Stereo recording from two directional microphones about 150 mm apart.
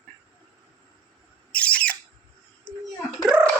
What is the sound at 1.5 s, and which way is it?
Bird, 10° left (ahead or behind).